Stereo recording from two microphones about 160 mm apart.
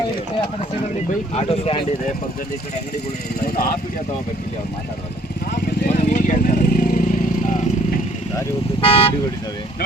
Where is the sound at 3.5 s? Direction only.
65° left (ahead or behind).